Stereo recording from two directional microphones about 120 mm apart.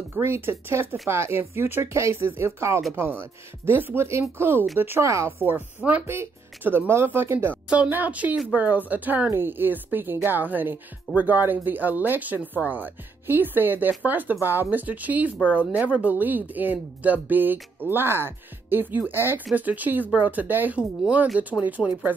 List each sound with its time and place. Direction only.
0.1 s speech: 20° right (ahead or behind)